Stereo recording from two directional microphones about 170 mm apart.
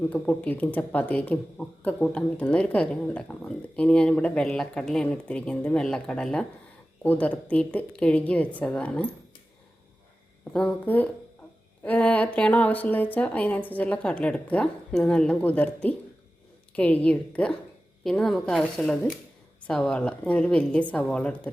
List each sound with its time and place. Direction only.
0.1 s speech: 10° left (ahead or behind)
10.5 s a woman's voice: 5° left (ahead or behind)